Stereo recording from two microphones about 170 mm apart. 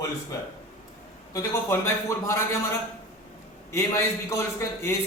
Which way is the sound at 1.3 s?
15° left (ahead or behind).